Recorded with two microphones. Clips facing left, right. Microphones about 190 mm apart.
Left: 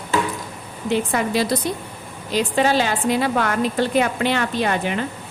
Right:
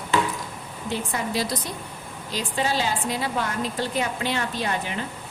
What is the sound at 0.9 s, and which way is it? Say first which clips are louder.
A woman's voice: left 7 dB; 70° left (ahead or behind).